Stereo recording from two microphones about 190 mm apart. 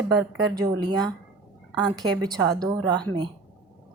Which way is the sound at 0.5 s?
25° right (ahead or behind).